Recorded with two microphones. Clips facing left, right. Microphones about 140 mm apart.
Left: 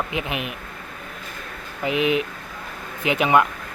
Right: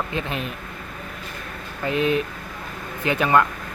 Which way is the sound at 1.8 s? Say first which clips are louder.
Even; 15° left (ahead or behind).